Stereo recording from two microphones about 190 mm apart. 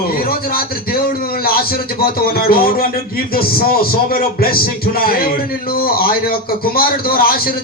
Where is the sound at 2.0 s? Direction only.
50° left (ahead or behind).